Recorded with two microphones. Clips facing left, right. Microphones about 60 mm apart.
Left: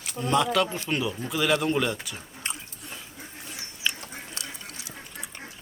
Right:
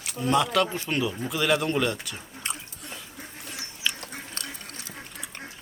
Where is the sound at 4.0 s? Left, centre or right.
Right.